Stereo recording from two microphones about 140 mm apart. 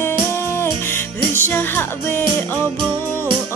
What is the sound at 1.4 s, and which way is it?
Music, 15° left (ahead or behind).